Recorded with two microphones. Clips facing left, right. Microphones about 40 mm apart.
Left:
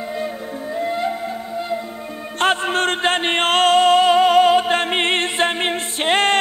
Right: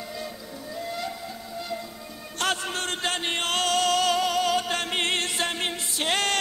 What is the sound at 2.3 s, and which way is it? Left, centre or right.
Music, left.